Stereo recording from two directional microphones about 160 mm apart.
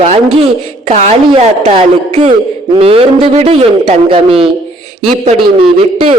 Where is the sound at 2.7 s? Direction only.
35° right (ahead or behind).